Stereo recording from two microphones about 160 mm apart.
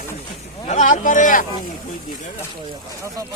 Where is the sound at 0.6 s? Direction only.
50° left (ahead or behind).